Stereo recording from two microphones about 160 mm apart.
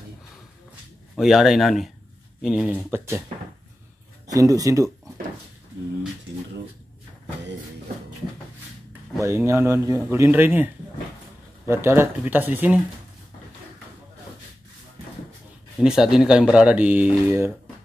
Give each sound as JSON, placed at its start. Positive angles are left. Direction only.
{"t": 1.1, "sound": "speech", "side_deg": 0}
{"t": 4.3, "sound": "speech", "side_deg": -20}
{"t": 9.2, "sound": "a man's voice", "side_deg": -15}
{"t": 15.8, "sound": "speech", "side_deg": -5}